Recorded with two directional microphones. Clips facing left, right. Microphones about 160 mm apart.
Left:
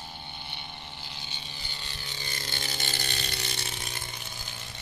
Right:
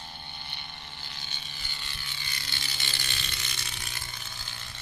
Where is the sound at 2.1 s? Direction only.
40° left (ahead or behind).